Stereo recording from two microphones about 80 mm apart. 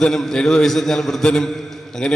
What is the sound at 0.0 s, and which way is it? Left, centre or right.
A man's voice, centre.